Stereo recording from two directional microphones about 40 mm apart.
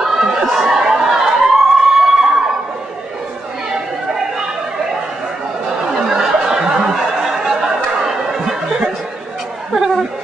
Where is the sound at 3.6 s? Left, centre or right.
Centre.